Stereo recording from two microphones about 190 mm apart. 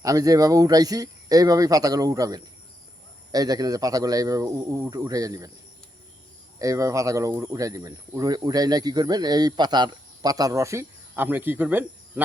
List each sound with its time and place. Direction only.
0.0 s speech: 20° right (ahead or behind)
6.6 s speech: 15° right (ahead or behind)